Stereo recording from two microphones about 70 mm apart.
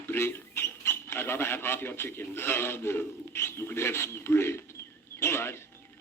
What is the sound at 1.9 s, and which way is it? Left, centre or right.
Speech, left.